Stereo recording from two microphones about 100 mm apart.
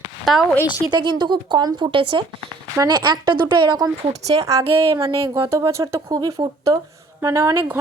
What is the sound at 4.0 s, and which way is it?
Speech, 85° right.